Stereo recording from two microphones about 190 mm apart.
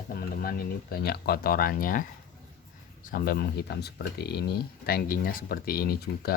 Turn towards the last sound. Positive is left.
turn(degrees=55)  # may be behind; listen again after turning